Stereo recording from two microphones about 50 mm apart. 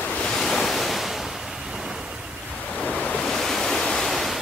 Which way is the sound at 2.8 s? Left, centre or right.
Centre.